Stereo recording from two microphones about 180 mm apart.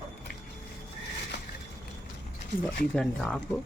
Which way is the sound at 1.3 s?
75° left (ahead or behind).